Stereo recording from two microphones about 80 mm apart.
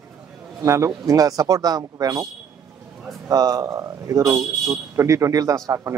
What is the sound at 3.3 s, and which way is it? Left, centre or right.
A man's voice, right.